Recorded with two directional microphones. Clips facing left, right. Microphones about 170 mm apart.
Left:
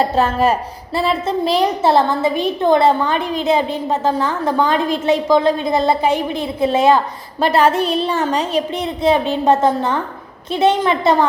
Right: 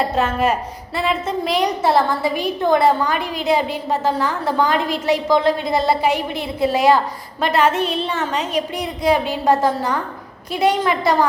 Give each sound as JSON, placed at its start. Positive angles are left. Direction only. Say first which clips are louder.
{"t": 0.0, "sound": "a woman's voice", "louder": "left 3 dB", "side_deg": 30}
{"t": 7.4, "sound": "a woman's voice", "louder": "left 3 dB", "side_deg": 35}
{"t": 9.0, "sound": "a woman's voice", "louder": "left 2 dB", "side_deg": 25}